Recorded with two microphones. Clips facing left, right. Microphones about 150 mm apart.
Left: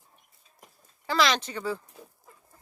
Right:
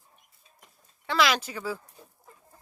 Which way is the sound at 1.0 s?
Centre (ahead or behind).